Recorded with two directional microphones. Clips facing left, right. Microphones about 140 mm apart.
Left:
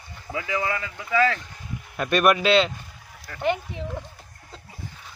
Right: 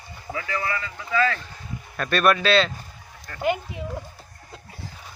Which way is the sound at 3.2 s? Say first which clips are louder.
Even; centre (ahead or behind).